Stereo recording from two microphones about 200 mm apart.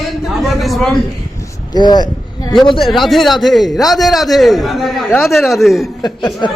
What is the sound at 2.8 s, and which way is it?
A man's voice, centre (ahead or behind).